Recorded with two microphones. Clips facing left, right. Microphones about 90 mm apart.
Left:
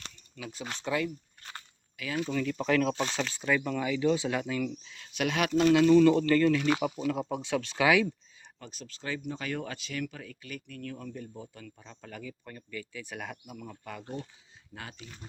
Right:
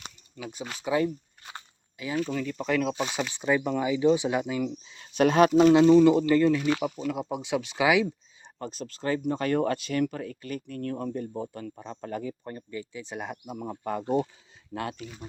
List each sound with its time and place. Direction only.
0.0 s a sound: 15° right (ahead or behind)
0.6 s speech: 5° right (ahead or behind)
1.5 s a sound: 20° right (ahead or behind)
2.3 s speech: 5° right (ahead or behind); by 4.7 s 20° right (ahead or behind)
4.9 s speech: 30° right (ahead or behind)
5.5 s speech: 5° right (ahead or behind)
5.7 s speech: 20° right (ahead or behind)
8.5 s speech: 40° right (ahead or behind)
14.7 s speech: 60° right (ahead or behind)